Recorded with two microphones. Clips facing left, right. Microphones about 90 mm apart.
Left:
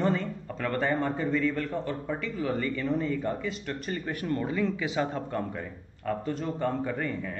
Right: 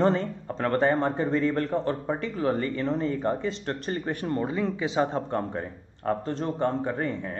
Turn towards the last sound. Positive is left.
turn(degrees=-30)  # may be behind; listen again after turning